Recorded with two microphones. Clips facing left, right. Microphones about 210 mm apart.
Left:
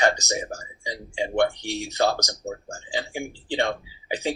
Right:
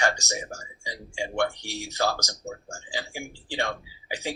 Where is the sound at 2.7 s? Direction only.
20° left (ahead or behind).